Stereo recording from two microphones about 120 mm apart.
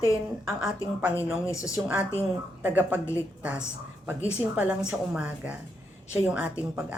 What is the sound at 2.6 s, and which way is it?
Speech, 15° right (ahead or behind).